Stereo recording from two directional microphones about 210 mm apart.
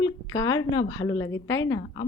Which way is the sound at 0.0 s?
20° left (ahead or behind).